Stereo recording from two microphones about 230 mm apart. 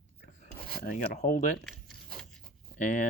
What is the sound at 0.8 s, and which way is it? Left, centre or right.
Speech, left.